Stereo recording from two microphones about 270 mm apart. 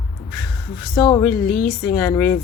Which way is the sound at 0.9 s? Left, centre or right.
Centre.